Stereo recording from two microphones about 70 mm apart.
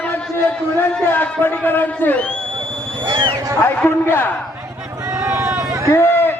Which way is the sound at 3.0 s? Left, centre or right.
Right.